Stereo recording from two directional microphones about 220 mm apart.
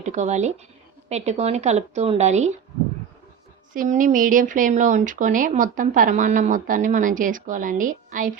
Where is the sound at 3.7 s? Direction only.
40° right (ahead or behind).